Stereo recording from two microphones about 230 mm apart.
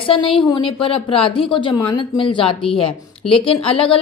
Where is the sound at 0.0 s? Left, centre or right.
Left.